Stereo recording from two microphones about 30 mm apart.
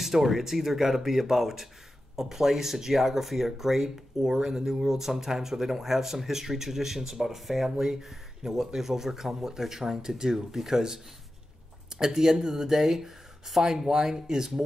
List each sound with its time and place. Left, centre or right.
0.0 s speech: centre
7.7 s speech: centre
8.0 s speech: centre
12.0 s speech: centre